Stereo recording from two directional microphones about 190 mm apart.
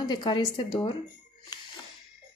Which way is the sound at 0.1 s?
20° left (ahead or behind).